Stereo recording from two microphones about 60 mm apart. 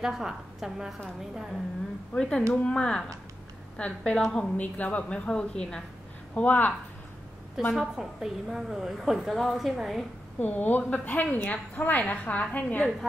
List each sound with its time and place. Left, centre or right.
0.0 s a woman's voice: centre
2.1 s a woman's voice: centre
6.3 s a woman's voice: left
7.7 s a woman's voice: centre
10.4 s a woman's voice: left
11.5 s a woman's voice: left